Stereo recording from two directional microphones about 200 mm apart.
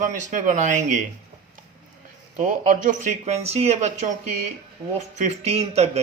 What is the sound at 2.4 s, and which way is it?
Speech, 40° right (ahead or behind).